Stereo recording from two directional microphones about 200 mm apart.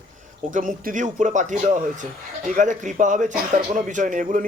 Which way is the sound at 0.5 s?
40° right (ahead or behind).